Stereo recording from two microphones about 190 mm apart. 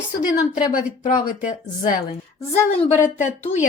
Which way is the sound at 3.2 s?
40° left (ahead or behind).